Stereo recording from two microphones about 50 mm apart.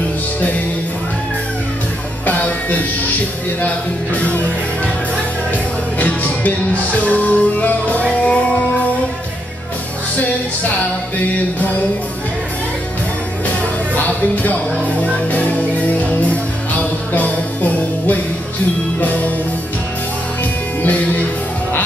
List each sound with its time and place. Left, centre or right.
2.2 s music: left
5.9 s music: left
14.3 s music: left
17.1 s music: left